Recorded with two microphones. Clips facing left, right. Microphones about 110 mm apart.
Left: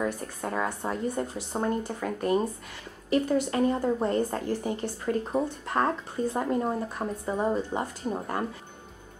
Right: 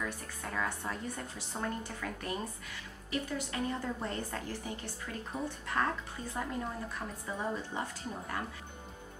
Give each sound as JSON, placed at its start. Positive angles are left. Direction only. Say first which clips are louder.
{"t": 0.0, "sound": "a woman's voice", "louder": "left 9 dB", "side_deg": 35}